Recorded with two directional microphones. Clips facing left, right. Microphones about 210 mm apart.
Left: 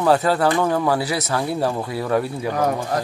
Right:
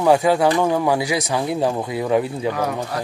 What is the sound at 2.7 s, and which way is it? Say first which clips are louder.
Speech: left 3 dB; 45° left (ahead or behind).